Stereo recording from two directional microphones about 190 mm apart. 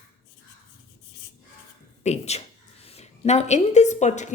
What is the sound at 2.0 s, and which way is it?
A woman's voice, 35° left (ahead or behind).